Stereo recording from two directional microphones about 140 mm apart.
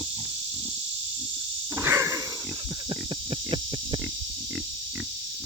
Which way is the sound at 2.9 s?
40° right (ahead or behind).